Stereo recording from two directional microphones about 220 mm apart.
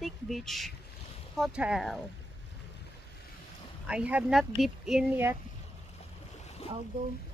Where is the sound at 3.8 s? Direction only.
5° right (ahead or behind).